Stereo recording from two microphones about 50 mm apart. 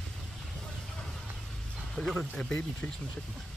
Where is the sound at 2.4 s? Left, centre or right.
Left.